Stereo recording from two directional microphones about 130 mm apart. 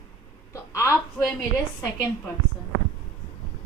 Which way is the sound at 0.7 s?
20° left (ahead or behind).